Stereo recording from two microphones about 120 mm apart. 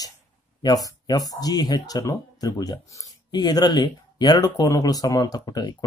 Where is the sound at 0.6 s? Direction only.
30° left (ahead or behind).